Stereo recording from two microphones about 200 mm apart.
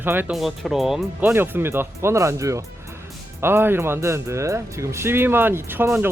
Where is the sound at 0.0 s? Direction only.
10° right (ahead or behind).